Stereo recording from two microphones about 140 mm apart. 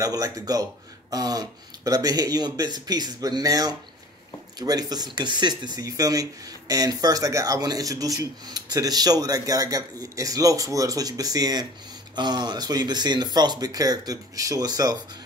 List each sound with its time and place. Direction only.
0.0 s speech: 25° right (ahead or behind)